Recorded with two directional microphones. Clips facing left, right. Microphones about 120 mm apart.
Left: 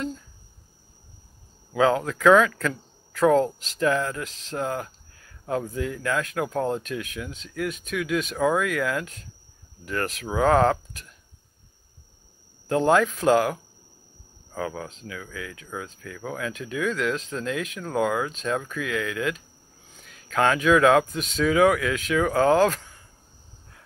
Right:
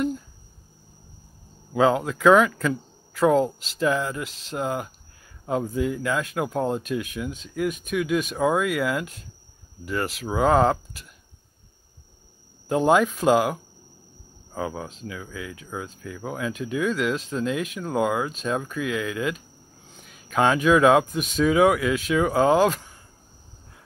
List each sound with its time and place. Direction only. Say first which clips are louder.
1.7 s speech: right 1 dB; 10° right (ahead or behind)
12.6 s speech: right 1 dB; 15° right (ahead or behind)